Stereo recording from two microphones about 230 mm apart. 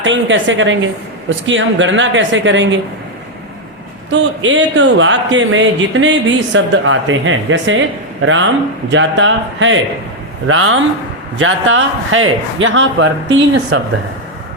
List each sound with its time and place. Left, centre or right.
0.0 s speech: right
4.1 s speech: right